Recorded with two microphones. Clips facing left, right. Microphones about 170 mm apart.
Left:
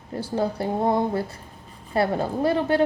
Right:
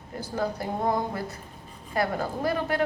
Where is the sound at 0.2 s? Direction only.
30° left (ahead or behind).